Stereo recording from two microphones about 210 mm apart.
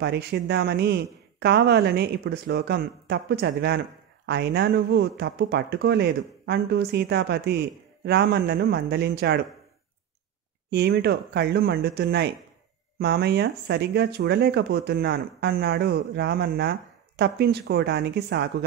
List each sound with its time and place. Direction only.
0.0 s speech: 50° right (ahead or behind)
10.7 s speech: 50° right (ahead or behind)